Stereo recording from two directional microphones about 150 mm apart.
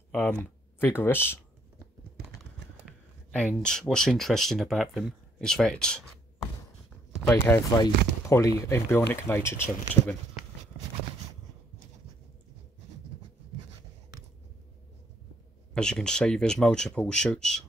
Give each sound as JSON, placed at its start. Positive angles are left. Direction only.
{"t": 0.1, "sound": "speech", "side_deg": 10}
{"t": 3.3, "sound": "speech", "side_deg": 5}
{"t": 7.7, "sound": "speech", "side_deg": 25}
{"t": 15.7, "sound": "speech", "side_deg": 5}